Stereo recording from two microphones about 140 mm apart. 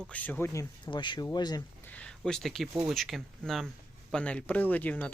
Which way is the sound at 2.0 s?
5° left (ahead or behind).